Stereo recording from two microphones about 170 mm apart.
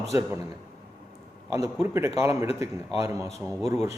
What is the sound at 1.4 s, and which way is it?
A man's voice, 15° right (ahead or behind).